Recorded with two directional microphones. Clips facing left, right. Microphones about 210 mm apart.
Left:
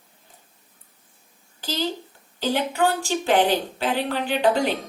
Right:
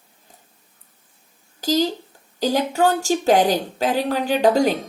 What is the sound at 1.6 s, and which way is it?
A woman's voice, 40° right (ahead or behind).